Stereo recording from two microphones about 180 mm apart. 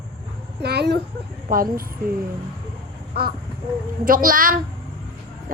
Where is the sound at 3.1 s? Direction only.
60° right (ahead or behind).